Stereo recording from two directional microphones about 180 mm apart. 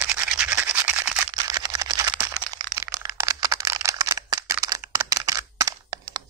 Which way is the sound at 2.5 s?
20° right (ahead or behind).